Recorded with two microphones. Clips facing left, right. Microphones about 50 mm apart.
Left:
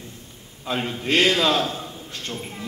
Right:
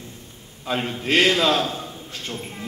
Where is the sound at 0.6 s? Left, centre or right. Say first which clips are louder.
Right 1 dB; centre.